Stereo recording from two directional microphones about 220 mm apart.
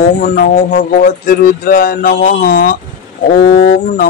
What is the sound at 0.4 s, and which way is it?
Speech, 40° left (ahead or behind).